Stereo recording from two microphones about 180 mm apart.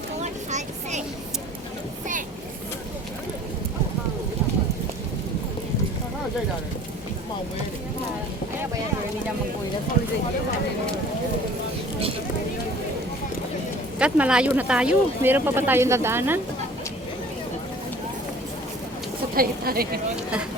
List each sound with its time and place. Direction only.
0.2 s vehicle: 40° right (ahead or behind)
14.0 s speech: 5° right (ahead or behind)
19.4 s a woman's voice: 55° right (ahead or behind)